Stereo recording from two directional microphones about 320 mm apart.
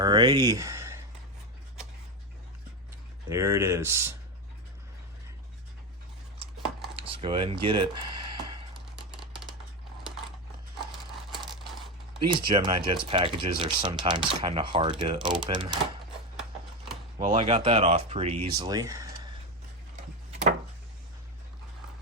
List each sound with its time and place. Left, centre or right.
0.0 s speech: centre
3.2 s speech: centre
6.9 s a sound: centre
10.9 s a sound: centre
12.2 s speech: centre
17.2 s speech: centre